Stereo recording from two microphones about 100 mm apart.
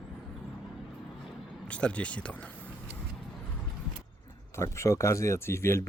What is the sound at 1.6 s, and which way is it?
Speech, 10° left (ahead or behind).